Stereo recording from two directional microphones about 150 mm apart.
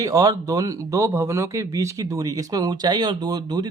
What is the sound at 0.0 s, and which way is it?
Speech, 25° right (ahead or behind).